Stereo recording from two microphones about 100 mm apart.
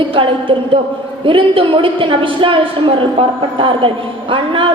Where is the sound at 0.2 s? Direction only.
60° right (ahead or behind).